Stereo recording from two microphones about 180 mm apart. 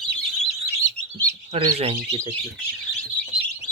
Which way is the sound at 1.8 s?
30° right (ahead or behind).